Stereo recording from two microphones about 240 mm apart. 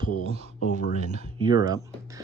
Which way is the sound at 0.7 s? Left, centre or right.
Left.